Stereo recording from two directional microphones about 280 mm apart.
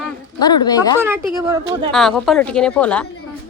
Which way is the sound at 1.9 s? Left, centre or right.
Centre.